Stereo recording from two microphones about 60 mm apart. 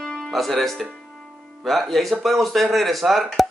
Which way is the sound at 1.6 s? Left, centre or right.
Centre.